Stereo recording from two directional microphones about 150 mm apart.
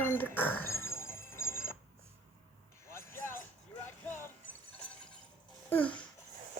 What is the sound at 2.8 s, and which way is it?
Basketball bounce, 15° left (ahead or behind).